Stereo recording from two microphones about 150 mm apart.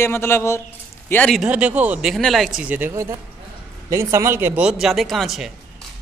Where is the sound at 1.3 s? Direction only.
5° right (ahead or behind).